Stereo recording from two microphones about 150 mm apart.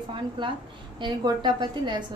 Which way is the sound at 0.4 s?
35° right (ahead or behind).